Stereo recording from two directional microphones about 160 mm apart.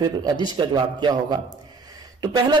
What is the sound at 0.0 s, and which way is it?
A man's voice, 25° right (ahead or behind).